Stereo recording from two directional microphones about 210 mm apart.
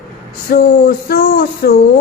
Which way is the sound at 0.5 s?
45° left (ahead or behind).